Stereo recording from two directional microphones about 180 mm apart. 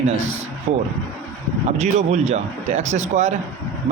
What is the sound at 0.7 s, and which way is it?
Speech, 40° right (ahead or behind).